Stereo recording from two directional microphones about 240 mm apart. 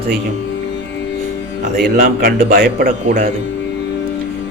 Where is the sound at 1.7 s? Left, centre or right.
Right.